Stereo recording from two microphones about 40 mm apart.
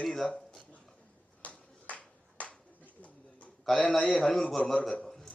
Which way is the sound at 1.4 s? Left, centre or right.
Left.